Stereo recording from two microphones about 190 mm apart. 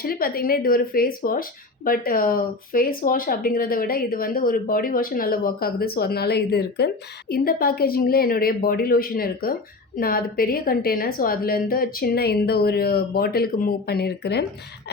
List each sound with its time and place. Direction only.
0.0 s speech: 50° left (ahead or behind)